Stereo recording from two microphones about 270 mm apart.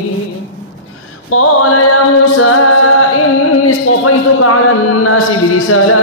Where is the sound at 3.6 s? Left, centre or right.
Left.